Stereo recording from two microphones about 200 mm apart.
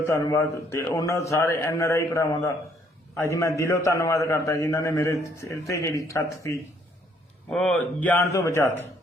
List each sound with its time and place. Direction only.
0.0 s a man's voice: 15° left (ahead or behind)